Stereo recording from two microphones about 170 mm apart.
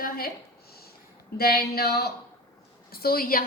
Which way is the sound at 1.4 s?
65° left (ahead or behind).